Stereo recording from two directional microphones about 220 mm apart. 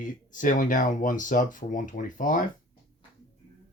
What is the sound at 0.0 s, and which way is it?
Speech, 35° left (ahead or behind).